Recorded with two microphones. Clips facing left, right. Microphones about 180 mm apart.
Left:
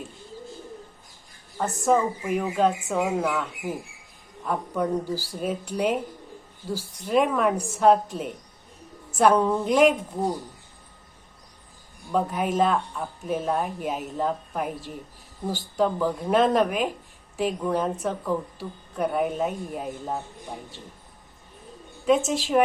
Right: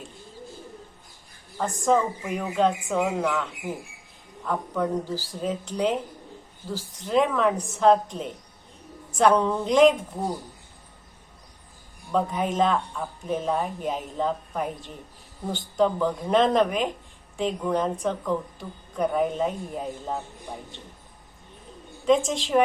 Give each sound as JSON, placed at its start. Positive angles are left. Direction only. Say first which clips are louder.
{"t": 1.5, "sound": "speech", "louder": "even", "side_deg": 5}
{"t": 12.1, "sound": "speech", "louder": "even", "side_deg": 5}
{"t": 22.0, "sound": "speech", "louder": "even", "side_deg": 5}